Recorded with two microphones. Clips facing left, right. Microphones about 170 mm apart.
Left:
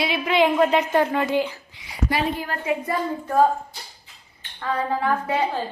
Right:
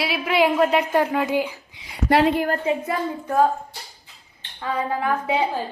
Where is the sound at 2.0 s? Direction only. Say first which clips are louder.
Right 7 dB; 70° right (ahead or behind).